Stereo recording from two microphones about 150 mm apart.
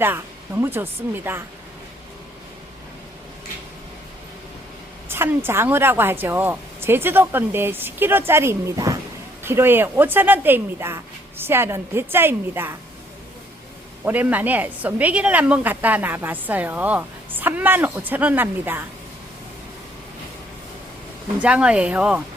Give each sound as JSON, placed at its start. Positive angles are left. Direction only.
{"t": 0.0, "sound": "a woman's voice", "side_deg": -15}
{"t": 5.0, "sound": "a woman's voice", "side_deg": -15}
{"t": 14.0, "sound": "a woman's voice", "side_deg": -10}
{"t": 21.4, "sound": "a woman's voice", "side_deg": -5}